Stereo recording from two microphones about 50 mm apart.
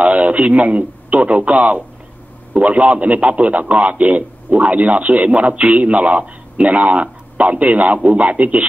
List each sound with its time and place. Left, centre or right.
0.0 s a man's voice: right